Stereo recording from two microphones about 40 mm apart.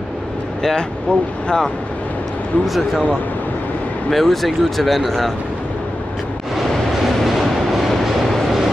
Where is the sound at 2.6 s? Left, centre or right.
Centre.